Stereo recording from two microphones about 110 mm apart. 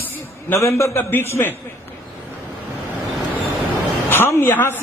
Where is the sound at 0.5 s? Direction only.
25° left (ahead or behind).